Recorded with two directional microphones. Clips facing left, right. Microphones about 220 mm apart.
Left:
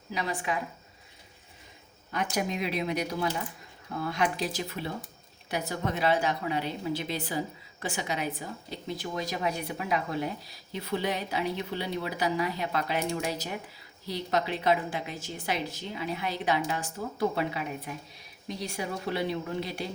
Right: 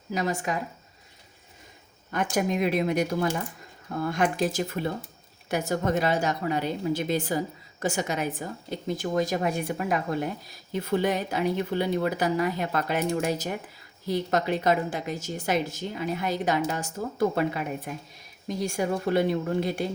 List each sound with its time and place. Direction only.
0.1 s a woman's voice: 45° right (ahead or behind)
2.3 s a woman's voice: 50° right (ahead or behind)